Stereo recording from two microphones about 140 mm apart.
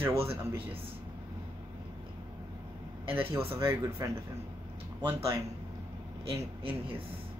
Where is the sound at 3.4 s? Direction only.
20° right (ahead or behind).